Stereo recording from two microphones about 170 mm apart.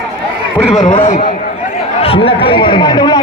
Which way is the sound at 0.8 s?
40° left (ahead or behind).